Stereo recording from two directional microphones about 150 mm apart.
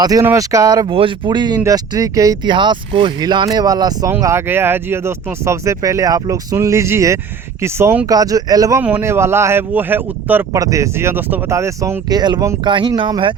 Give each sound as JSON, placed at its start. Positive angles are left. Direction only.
{"t": 0.0, "sound": "speech", "side_deg": -20}
{"t": 0.9, "sound": "speech", "side_deg": -35}
{"t": 8.8, "sound": "speech", "side_deg": -15}